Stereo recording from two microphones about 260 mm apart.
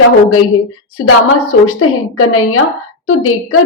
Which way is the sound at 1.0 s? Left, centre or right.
Left.